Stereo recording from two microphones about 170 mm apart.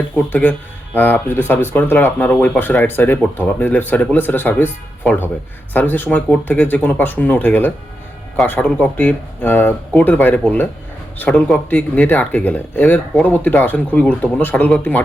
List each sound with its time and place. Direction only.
0.3 s speech: 10° left (ahead or behind)